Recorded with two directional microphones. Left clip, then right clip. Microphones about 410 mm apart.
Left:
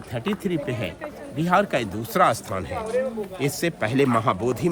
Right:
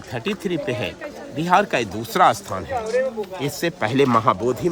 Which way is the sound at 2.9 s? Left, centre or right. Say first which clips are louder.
Right 3 dB; right.